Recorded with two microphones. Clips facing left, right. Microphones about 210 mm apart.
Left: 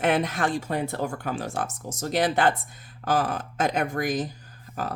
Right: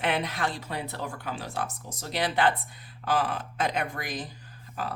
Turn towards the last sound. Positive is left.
turn(degrees=45)  # may be behind; listen again after turning